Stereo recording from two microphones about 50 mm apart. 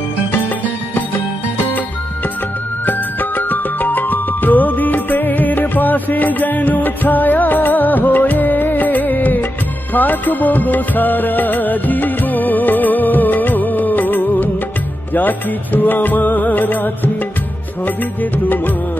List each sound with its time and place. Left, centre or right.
2.9 s music: left